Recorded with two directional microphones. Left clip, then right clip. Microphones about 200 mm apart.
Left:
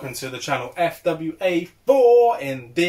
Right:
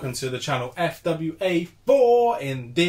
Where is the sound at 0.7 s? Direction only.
15° right (ahead or behind).